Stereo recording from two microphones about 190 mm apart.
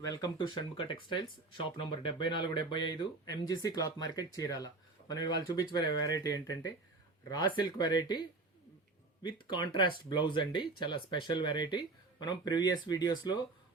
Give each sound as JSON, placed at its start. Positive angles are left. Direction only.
{"t": 0.1, "sound": "speech", "side_deg": 25}